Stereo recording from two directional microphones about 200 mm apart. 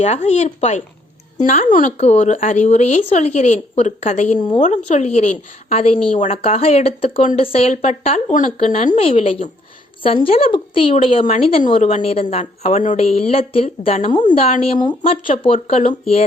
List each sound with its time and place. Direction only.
0.0 s speech: 35° left (ahead or behind)
4.4 s a woman's voice: 20° left (ahead or behind)
4.6 s a woman's voice: 35° left (ahead or behind)